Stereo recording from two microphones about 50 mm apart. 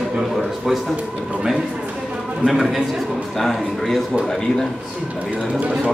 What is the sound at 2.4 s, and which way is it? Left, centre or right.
Speech, centre.